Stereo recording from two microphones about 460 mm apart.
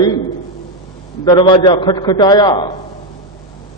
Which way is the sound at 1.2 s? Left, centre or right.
Centre.